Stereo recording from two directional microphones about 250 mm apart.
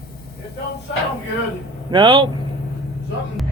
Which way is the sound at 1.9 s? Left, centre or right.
Centre.